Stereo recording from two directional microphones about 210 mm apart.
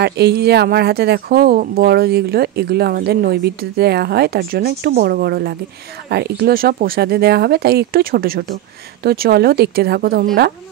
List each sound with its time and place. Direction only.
0.0 s speech: 50° right (ahead or behind)